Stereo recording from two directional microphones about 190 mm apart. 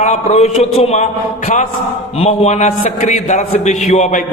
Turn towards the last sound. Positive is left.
turn(degrees=40)  # may be behind; listen again after turning